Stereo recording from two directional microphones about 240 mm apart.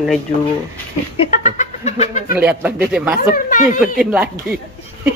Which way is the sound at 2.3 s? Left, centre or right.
Centre.